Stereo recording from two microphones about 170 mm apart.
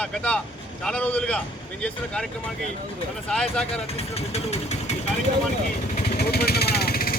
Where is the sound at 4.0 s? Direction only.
40° left (ahead or behind).